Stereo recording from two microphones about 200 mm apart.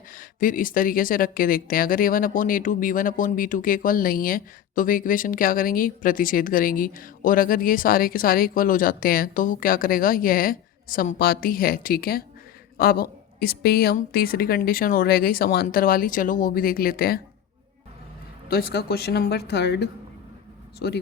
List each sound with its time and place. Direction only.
0.1 s speech: 45° left (ahead or behind)
18.4 s speech: 50° left (ahead or behind)